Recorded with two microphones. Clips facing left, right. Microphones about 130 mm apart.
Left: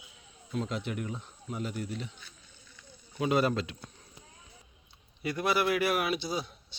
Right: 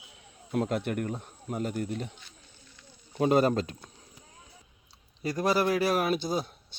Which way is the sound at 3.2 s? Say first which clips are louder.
Right 4 dB; 45° right (ahead or behind).